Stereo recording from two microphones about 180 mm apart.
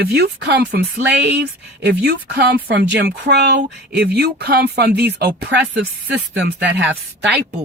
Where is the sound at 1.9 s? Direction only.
65° right (ahead or behind).